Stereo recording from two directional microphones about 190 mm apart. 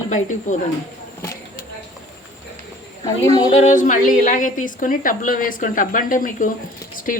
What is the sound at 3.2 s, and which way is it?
Speech, 25° left (ahead or behind).